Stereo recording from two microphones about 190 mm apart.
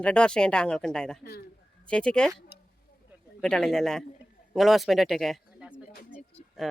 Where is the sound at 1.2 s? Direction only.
55° left (ahead or behind).